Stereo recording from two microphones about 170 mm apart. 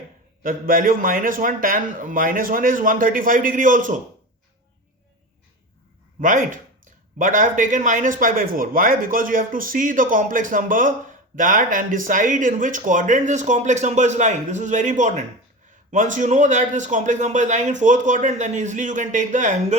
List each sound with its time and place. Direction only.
0.4 s speech: 55° right (ahead or behind)
6.1 s speech: 50° right (ahead or behind)